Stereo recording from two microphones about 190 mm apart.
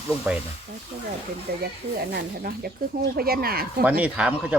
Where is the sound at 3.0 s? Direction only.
50° right (ahead or behind).